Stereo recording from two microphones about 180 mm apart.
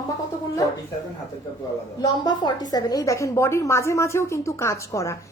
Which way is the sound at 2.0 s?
25° left (ahead or behind).